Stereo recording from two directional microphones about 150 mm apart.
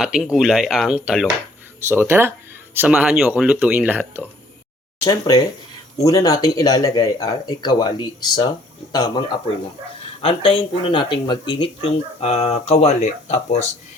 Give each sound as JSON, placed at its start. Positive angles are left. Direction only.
{"t": 0.0, "sound": "speech", "side_deg": -5}
{"t": 1.9, "sound": "speech", "side_deg": -15}
{"t": 5.0, "sound": "speech", "side_deg": 25}
{"t": 10.2, "sound": "speech", "side_deg": 40}